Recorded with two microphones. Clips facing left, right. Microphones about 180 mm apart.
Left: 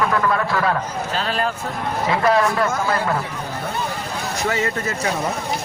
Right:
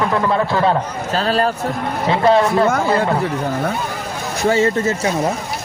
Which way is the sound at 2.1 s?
25° right (ahead or behind).